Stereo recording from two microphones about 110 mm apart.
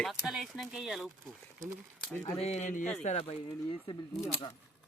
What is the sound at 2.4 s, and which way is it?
Speech, 80° left.